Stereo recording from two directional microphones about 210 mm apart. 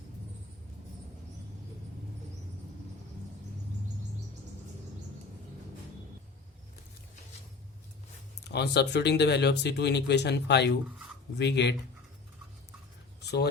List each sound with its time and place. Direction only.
8.4 s speech: 50° left (ahead or behind)